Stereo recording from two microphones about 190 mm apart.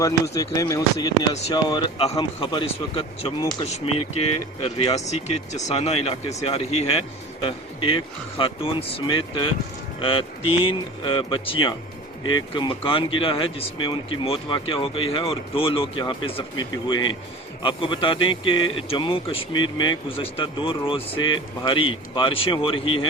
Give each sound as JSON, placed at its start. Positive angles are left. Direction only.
{"t": 0.0, "sound": "speech", "side_deg": 15}
{"t": 4.6, "sound": "speech", "side_deg": 30}